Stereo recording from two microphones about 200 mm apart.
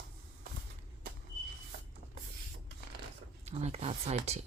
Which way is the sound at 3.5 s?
35° right (ahead or behind).